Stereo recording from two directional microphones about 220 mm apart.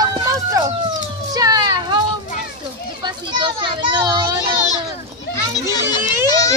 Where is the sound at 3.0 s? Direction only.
20° right (ahead or behind).